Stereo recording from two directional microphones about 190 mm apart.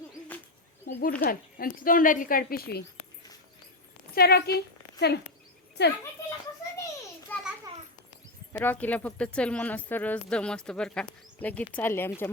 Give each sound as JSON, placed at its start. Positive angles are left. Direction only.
{"t": 0.9, "sound": "a woman's voice", "side_deg": 55}
{"t": 4.1, "sound": "a woman's voice", "side_deg": 55}
{"t": 7.3, "sound": "a sound", "side_deg": 10}
{"t": 8.5, "sound": "speech", "side_deg": 10}